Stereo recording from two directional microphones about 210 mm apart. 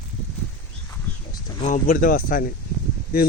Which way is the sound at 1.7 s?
40° left (ahead or behind).